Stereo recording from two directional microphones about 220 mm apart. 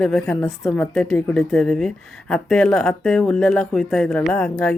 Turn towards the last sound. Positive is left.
turn(degrees=5)  # may be behind; listen again after turning